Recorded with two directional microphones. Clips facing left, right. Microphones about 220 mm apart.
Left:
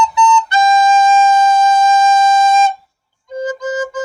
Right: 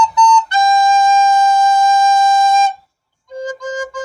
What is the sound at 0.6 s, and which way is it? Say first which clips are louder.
Music: left 3 dB; 20° left (ahead or behind).